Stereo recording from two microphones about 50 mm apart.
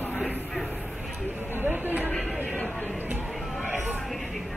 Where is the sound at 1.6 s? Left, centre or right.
Right.